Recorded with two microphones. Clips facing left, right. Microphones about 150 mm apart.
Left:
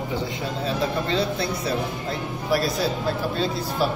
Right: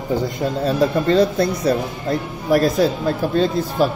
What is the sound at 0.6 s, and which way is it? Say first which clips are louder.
A man's voice: right 8 dB; 45° right (ahead or behind).